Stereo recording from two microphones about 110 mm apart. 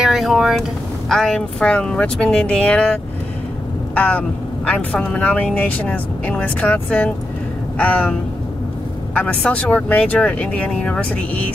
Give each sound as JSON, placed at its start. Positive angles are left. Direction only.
{"t": 0.0, "sound": "speech", "side_deg": 0}
{"t": 3.9, "sound": "vehicle", "side_deg": 10}
{"t": 4.6, "sound": "speech", "side_deg": 10}